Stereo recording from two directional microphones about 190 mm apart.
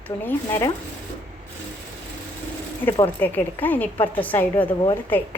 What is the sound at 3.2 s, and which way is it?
A woman's voice, 10° left (ahead or behind).